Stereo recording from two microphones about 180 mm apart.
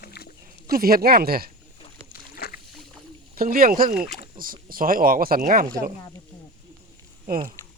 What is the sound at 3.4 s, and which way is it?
Speech, 55° right (ahead or behind).